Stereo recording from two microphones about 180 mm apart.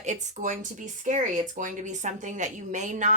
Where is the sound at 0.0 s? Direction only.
40° right (ahead or behind).